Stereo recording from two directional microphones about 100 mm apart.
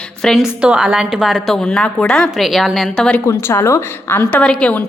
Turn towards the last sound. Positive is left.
turn(degrees=10)  # may be behind; listen again after turning